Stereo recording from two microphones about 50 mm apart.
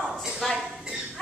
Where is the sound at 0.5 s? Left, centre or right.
Centre.